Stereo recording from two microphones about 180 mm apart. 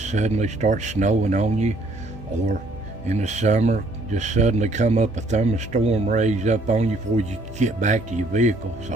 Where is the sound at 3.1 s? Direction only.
40° right (ahead or behind).